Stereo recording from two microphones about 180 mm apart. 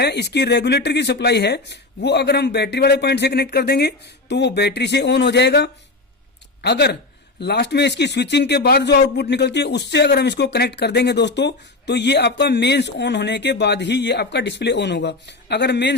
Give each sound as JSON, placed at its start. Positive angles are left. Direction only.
{"t": 0.0, "sound": "a man's voice", "side_deg": 70}